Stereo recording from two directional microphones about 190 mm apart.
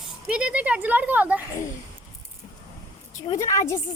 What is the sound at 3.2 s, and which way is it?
Speech, 15° left (ahead or behind).